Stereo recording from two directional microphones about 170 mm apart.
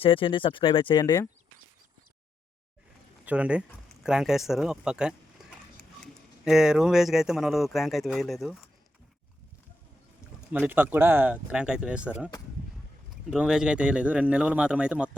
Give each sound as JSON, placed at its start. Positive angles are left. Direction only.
{"t": 0.0, "sound": "speech", "side_deg": 30}
{"t": 3.2, "sound": "speech", "side_deg": -5}
{"t": 10.5, "sound": "speech", "side_deg": -10}
{"t": 13.3, "sound": "speech", "side_deg": -5}